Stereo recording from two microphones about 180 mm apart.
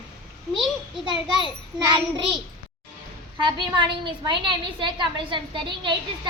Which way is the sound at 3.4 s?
25° right (ahead or behind).